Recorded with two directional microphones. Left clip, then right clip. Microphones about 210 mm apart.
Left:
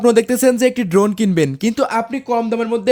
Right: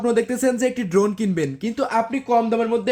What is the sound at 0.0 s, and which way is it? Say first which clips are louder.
Speech: left 7 dB; 55° left (ahead or behind).